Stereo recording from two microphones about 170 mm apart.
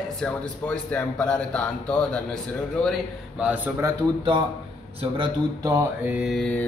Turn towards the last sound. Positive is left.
turn(degrees=5)  # may be behind; listen again after turning